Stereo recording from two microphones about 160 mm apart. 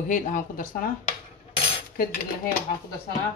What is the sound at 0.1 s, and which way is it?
Speech, 55° left (ahead or behind).